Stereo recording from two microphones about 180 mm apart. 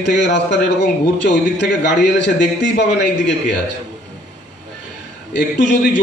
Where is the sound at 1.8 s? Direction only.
75° left (ahead or behind).